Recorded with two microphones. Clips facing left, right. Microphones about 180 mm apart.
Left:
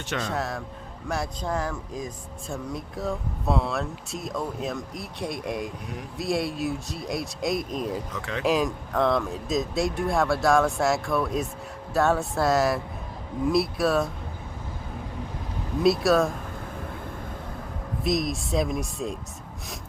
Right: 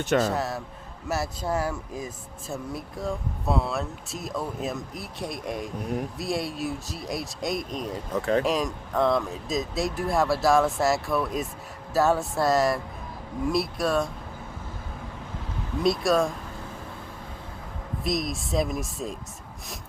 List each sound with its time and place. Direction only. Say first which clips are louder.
0.3 s speech: right 2 dB; centre (ahead or behind)
8.2 s speech: right 9 dB; 40° right (ahead or behind)
8.4 s speech: left 2 dB; centre (ahead or behind)
15.8 s speech: left 2 dB; centre (ahead or behind)
18.0 s speech: left 3 dB; centre (ahead or behind)